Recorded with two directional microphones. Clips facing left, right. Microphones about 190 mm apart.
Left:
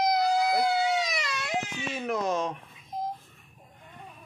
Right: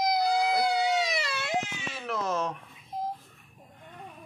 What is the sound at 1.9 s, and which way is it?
Speech, 15° left (ahead or behind).